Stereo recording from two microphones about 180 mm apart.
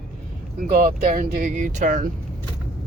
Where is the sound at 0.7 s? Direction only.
50° right (ahead or behind).